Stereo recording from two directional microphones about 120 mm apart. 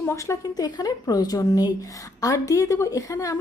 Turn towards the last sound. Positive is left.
turn(degrees=25)  # may be behind; listen again after turning